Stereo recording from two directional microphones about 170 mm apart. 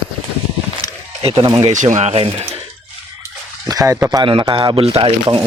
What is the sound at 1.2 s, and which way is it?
Speech, 25° right (ahead or behind).